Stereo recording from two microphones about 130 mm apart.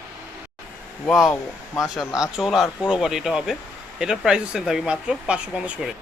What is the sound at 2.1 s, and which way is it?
Speech, 5° right (ahead or behind).